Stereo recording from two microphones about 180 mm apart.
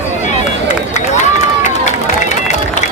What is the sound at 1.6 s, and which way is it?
Run, 40° left (ahead or behind).